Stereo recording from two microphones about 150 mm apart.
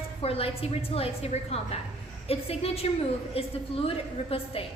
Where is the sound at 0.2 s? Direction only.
40° left (ahead or behind).